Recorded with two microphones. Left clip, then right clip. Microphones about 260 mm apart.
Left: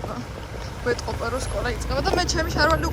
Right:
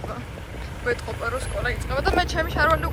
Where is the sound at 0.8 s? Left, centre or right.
Centre.